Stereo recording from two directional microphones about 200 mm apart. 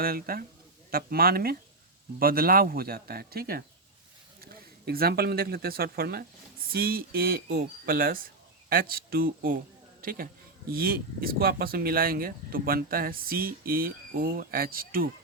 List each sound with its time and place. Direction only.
0.0 s speech: 50° right (ahead or behind)
4.9 s speech: 50° right (ahead or behind)